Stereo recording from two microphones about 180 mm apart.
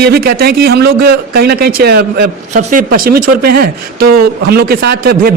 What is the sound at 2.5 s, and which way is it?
Speech, 45° right (ahead or behind).